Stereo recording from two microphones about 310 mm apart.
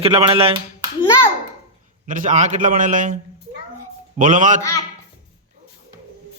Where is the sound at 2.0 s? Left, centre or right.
Right.